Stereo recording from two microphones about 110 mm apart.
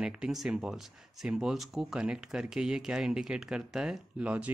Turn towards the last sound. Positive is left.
turn(degrees=-10)  # may be behind; listen again after turning